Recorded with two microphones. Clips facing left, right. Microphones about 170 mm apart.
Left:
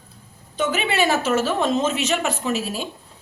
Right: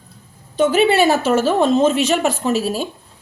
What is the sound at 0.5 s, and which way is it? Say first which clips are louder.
Speech: right 8 dB; 35° right (ahead or behind).